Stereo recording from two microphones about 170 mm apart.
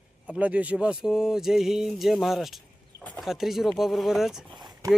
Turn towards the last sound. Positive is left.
turn(degrees=-25)  # may be behind; listen again after turning